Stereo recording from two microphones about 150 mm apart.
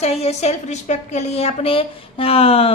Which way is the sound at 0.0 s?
45° left (ahead or behind).